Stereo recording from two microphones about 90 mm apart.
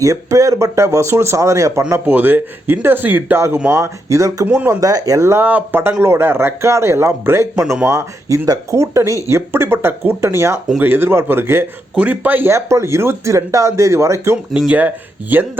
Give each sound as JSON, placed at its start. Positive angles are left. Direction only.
{"t": 0.0, "sound": "speech", "side_deg": -40}
{"t": 1.9, "sound": "a man's voice", "side_deg": -25}
{"t": 4.4, "sound": "a man's voice", "side_deg": -20}
{"t": 4.7, "sound": "speech", "side_deg": -40}
{"t": 5.4, "sound": "a man's voice", "side_deg": -20}
{"t": 7.5, "sound": "speech", "side_deg": -10}
{"t": 7.9, "sound": "a man's voice", "side_deg": -35}
{"t": 14.7, "sound": "a man's voice", "side_deg": -20}